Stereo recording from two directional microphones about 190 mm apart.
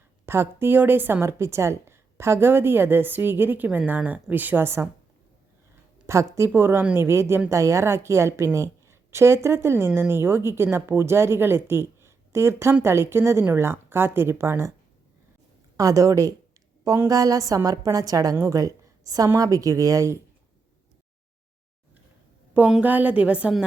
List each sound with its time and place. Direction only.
0.3 s a woman's voice: 10° right (ahead or behind)
6.3 s a woman's voice: 15° right (ahead or behind)
15.8 s a woman's voice: 15° right (ahead or behind)
22.5 s a woman's voice: 10° right (ahead or behind)